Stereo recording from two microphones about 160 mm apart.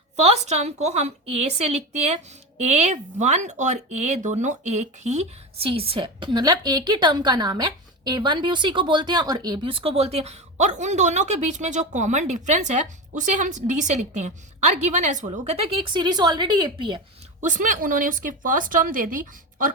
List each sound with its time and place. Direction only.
0.2 s a woman's voice: 45° right (ahead or behind)
15.7 s a woman's voice: 30° right (ahead or behind)
17.4 s speech: 50° right (ahead or behind)